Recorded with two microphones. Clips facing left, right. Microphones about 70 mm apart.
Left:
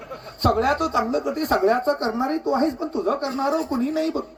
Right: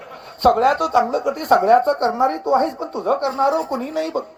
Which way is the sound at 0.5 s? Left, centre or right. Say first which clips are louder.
Right 5 dB; right.